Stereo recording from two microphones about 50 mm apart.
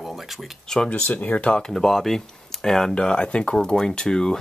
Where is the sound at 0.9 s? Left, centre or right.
Left.